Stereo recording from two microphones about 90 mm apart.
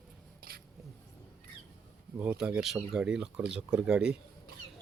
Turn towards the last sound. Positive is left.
turn(degrees=-10)  # may be behind; listen again after turning